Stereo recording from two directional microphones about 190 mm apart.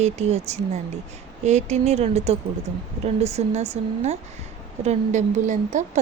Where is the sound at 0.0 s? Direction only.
35° right (ahead or behind).